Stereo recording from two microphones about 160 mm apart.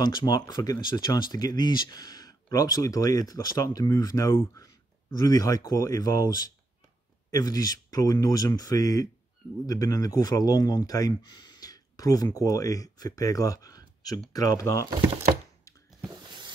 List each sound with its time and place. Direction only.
0.0 s speech: 25° left (ahead or behind)
7.2 s speech: 25° left (ahead or behind)
16.0 s a sound: 30° right (ahead or behind)